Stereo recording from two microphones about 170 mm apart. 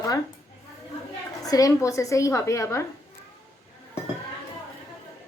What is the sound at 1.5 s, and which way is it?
A woman's voice, 20° left (ahead or behind).